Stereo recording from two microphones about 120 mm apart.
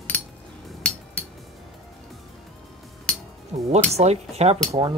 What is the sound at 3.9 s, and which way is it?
Speech, 60° right (ahead or behind).